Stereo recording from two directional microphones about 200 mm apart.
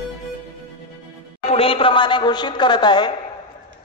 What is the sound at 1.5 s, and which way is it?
A woman's voice, 30° left (ahead or behind).